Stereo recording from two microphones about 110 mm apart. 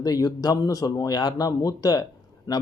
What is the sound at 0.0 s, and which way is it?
Speech, 35° left (ahead or behind).